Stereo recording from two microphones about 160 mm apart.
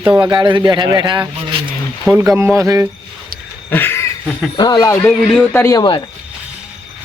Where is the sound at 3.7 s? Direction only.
15° left (ahead or behind).